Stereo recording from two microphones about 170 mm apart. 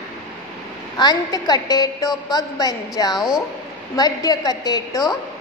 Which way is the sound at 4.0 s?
20° left (ahead or behind).